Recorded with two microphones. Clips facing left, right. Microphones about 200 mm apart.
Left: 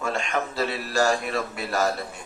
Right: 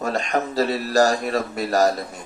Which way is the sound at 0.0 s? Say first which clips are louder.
Right 4 dB; 40° right (ahead or behind).